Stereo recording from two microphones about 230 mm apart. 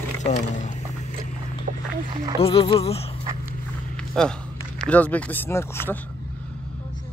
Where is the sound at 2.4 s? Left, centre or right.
Left.